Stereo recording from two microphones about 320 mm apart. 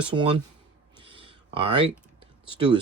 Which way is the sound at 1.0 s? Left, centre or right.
Centre.